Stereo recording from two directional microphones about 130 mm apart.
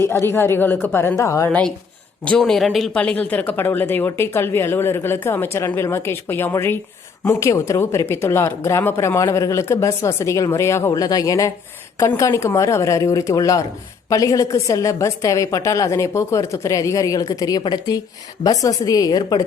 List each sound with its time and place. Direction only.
0.0 s speech: 20° left (ahead or behind)
1.5 s a woman's voice: 10° left (ahead or behind); by 19.4 s 30° left (ahead or behind)